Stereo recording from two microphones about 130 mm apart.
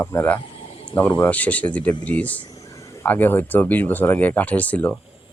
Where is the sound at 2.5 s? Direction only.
25° left (ahead or behind).